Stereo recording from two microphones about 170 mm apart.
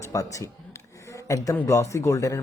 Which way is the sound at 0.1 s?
20° left (ahead or behind).